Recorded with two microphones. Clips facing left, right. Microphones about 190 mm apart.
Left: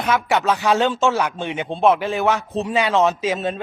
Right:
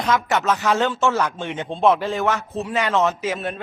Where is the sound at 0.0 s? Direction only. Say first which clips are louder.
Left 1 dB; 10° left (ahead or behind).